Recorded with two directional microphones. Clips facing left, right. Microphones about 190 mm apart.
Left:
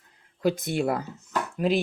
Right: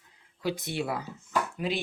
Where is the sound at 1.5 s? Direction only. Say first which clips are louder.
Left 7 dB; 45° left (ahead or behind).